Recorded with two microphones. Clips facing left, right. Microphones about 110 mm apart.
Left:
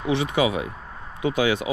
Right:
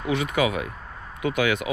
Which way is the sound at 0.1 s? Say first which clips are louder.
Left 2 dB; 30° left (ahead or behind).